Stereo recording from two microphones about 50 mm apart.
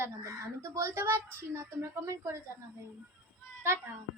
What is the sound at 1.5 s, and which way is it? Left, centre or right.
Speech, right.